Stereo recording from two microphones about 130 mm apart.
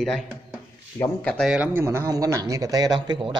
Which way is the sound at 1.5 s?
15° right (ahead or behind).